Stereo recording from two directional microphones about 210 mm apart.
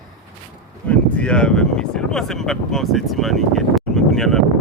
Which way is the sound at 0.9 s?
5° left (ahead or behind).